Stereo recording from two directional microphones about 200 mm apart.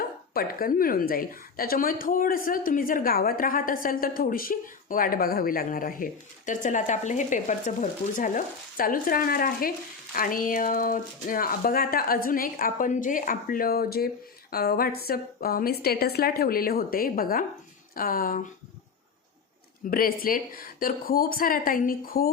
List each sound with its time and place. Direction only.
0.0 s a woman's voice: 45° left (ahead or behind)
19.9 s a woman's voice: 45° left (ahead or behind)